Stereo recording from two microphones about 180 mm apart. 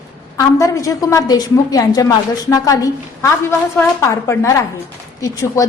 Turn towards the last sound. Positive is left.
turn(degrees=20)  # may be behind; listen again after turning